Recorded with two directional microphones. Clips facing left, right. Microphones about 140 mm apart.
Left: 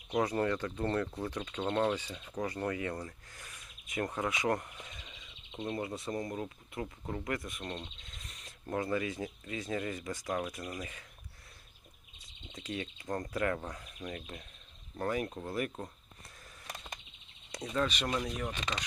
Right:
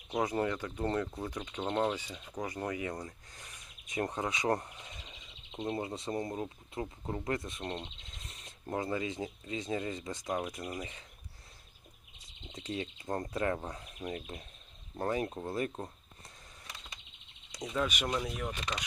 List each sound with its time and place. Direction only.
0.1 s speech: 10° right (ahead or behind)
12.5 s speech: 25° right (ahead or behind)
16.6 s bird: 40° left (ahead or behind)
17.6 s speech: 10° right (ahead or behind)